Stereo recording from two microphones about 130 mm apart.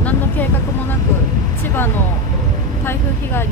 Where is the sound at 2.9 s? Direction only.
20° left (ahead or behind).